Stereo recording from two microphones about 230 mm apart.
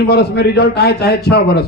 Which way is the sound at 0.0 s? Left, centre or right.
Left.